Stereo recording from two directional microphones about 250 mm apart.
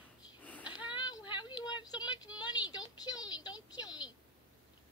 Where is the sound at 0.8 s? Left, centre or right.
Centre.